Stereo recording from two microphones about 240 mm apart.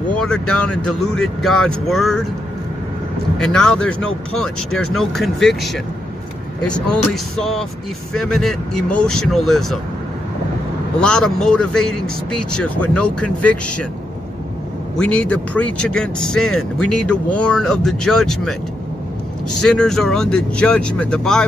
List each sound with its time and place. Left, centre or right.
0.1 s speech: centre
3.3 s speech: centre
11.0 s speech: centre
15.0 s speech: centre
19.6 s speech: centre